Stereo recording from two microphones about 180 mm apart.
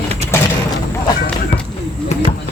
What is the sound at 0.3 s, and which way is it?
Mechanisms, 15° left (ahead or behind).